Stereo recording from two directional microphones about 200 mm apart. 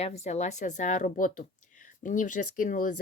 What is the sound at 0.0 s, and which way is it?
Speech, 35° left (ahead or behind).